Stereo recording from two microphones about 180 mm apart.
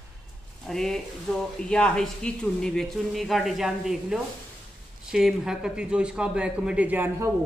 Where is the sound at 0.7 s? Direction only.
5° left (ahead or behind).